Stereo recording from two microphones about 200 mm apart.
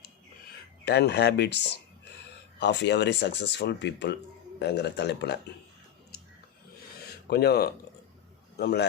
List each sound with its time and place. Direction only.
0.9 s speech: 55° left (ahead or behind)
2.6 s speech: 60° left (ahead or behind)
7.3 s speech: 55° left (ahead or behind)